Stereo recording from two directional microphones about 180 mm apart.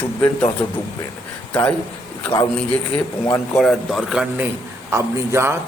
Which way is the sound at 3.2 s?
15° left (ahead or behind).